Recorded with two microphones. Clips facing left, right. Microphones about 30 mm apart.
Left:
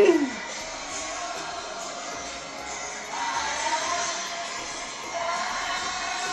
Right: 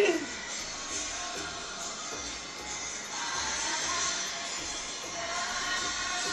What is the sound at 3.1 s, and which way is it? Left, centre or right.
Music, left.